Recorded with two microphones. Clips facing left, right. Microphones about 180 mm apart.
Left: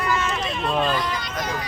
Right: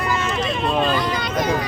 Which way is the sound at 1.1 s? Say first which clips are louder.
Right 7 dB; 60° right (ahead or behind).